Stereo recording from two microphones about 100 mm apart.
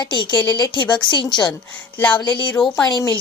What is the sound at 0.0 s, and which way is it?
Speech, 50° left (ahead or behind).